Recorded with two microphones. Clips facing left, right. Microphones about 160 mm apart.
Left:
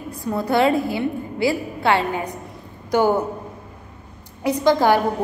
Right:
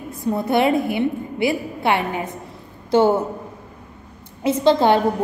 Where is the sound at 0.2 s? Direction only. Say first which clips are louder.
Even; 20° right (ahead or behind).